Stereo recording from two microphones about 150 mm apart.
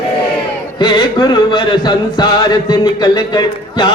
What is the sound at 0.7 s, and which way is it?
Music, 30° left (ahead or behind).